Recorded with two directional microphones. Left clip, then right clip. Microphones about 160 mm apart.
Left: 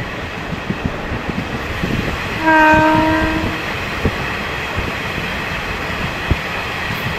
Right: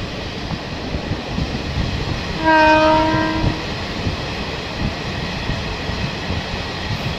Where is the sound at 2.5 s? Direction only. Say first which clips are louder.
Left 2 dB; 50° left (ahead or behind).